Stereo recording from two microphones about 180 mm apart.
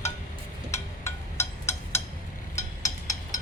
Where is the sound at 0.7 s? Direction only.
15° left (ahead or behind).